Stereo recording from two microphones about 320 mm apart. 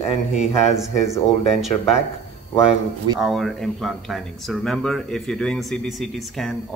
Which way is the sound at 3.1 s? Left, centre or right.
Centre.